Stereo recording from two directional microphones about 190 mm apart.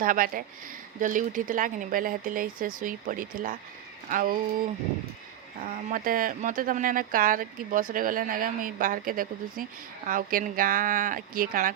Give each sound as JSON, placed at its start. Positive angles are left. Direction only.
{"t": 0.0, "sound": "speech", "side_deg": -45}
{"t": 5.5, "sound": "speech", "side_deg": -45}